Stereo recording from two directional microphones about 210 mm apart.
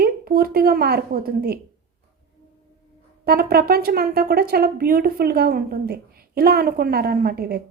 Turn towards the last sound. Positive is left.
turn(degrees=-50)  # may be behind; listen again after turning